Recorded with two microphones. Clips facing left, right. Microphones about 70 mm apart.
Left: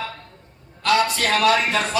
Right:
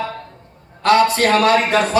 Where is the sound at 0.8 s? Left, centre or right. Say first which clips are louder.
Right 6 dB; right.